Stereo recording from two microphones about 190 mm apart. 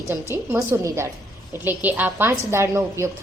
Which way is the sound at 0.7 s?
15° right (ahead or behind).